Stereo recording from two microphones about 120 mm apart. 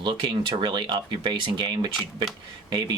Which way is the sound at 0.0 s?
40° right (ahead or behind).